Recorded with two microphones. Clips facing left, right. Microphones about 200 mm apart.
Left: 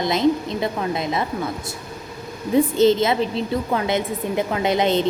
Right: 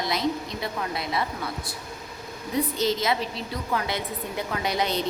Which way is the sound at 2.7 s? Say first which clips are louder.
Left 8 dB; 25° left (ahead or behind).